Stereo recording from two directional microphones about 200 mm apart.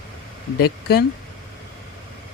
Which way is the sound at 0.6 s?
50° left (ahead or behind).